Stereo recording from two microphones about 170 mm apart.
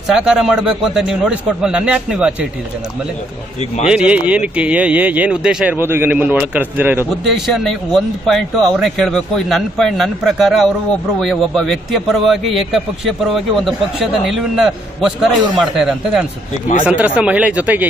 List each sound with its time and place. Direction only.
0.1 s a man's voice: 5° right (ahead or behind)
3.8 s speech: 5° right (ahead or behind)
7.2 s a man's voice: centre (ahead or behind)